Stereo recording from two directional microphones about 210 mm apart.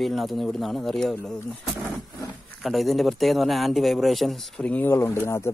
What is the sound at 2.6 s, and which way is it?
Speech, centre (ahead or behind).